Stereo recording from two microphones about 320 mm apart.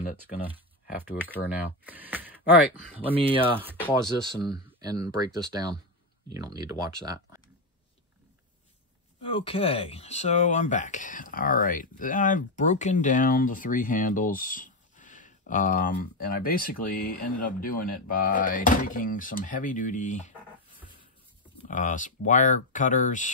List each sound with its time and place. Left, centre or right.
1.0 s speech: centre
3.2 s speech: centre
6.3 s speech: centre
9.2 s speech: centre
21.5 s speech: left